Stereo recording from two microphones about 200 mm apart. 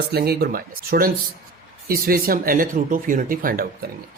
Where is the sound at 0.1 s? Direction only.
50° right (ahead or behind).